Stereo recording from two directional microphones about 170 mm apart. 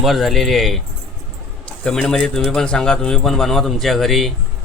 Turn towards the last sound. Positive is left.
turn(degrees=0)  # may be behind; listen again after turning